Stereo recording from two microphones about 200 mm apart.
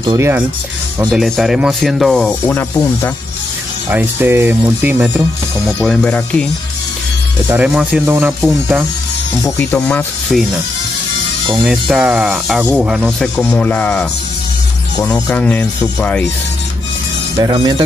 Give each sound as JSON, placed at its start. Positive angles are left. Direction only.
{"t": 0.0, "sound": "speech", "side_deg": -20}
{"t": 0.9, "sound": "speech", "side_deg": 0}
{"t": 3.9, "sound": "speech", "side_deg": -10}
{"t": 5.9, "sound": "speech", "side_deg": 5}
{"t": 7.4, "sound": "speech", "side_deg": -5}
{"t": 9.4, "sound": "speech", "side_deg": 10}
{"t": 11.5, "sound": "speech", "side_deg": 0}
{"t": 15.2, "sound": "speech", "side_deg": 5}
{"t": 17.4, "sound": "speech", "side_deg": -20}